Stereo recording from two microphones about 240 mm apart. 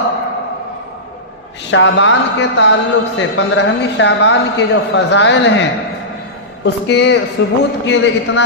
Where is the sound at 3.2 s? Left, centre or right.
Left.